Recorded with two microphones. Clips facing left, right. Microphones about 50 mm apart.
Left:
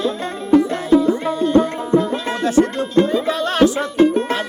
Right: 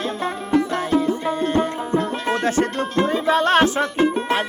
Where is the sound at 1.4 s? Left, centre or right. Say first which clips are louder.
Left 5 dB; right.